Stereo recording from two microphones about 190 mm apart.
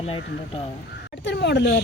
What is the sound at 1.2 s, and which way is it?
Speech, 65° left (ahead or behind).